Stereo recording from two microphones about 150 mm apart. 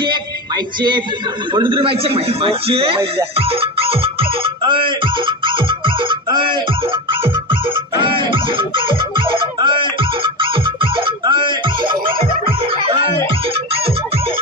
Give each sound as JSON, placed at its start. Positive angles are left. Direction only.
{"t": 1.5, "sound": "a man's voice", "side_deg": -35}
{"t": 3.3, "sound": "music", "side_deg": -40}
{"t": 8.0, "sound": "music", "side_deg": -35}